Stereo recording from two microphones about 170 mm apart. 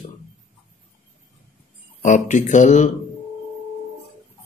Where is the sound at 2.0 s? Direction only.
45° left (ahead or behind).